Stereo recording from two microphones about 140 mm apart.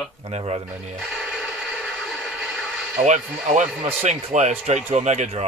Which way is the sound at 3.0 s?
60° right (ahead or behind).